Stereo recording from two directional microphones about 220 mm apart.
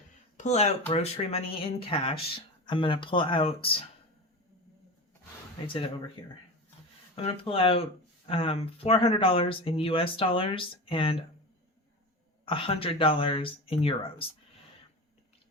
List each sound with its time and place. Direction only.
0.3 s speech: 30° left (ahead or behind)
5.6 s speech: 25° left (ahead or behind)
7.2 s speech: 25° left (ahead or behind)
12.5 s speech: 25° left (ahead or behind)